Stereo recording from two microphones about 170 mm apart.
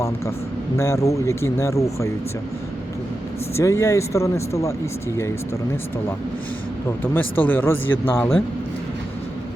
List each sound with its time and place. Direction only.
0.8 s speech: 15° left (ahead or behind)
3.6 s speech: 15° left (ahead or behind)
7.0 s speech: 10° left (ahead or behind)